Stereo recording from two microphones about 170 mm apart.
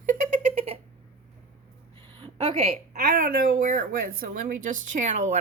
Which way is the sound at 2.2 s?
35° right (ahead or behind).